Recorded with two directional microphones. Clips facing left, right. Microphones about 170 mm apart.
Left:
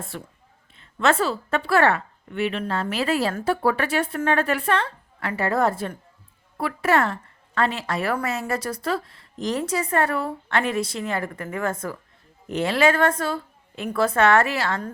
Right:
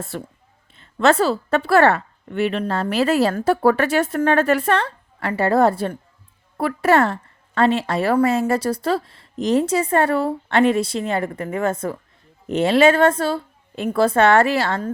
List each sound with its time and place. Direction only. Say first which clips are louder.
0.1 s a woman's voice: right 6 dB; 35° right (ahead or behind)